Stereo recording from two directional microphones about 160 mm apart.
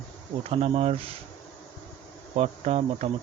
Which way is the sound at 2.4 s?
40° right (ahead or behind).